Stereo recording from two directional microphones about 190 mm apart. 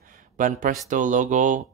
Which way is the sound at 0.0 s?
45° right (ahead or behind).